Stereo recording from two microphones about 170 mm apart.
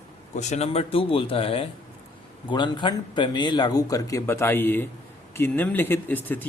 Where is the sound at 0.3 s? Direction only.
40° left (ahead or behind).